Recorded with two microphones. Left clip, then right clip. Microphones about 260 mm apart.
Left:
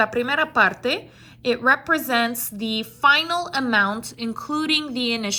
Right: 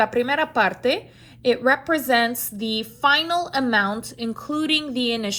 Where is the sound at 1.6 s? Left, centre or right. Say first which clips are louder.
Left 4 dB; left.